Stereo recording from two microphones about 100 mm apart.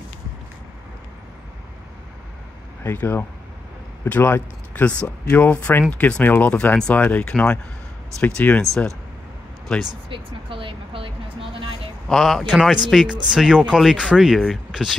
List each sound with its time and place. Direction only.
2.8 s speech: 20° left (ahead or behind)
9.7 s speech: 5° left (ahead or behind)
10.0 s speech: 60° right (ahead or behind)
12.1 s speech: centre (ahead or behind)